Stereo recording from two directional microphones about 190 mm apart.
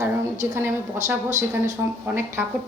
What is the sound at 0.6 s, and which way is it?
Speech, 15° right (ahead or behind).